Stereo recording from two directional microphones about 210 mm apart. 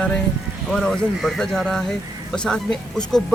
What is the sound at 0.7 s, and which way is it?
Speech, centre (ahead or behind).